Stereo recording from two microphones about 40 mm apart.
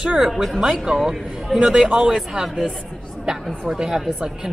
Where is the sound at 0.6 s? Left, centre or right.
Centre.